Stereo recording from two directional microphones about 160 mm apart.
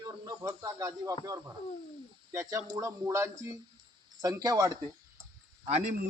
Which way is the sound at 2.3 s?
20° right (ahead or behind).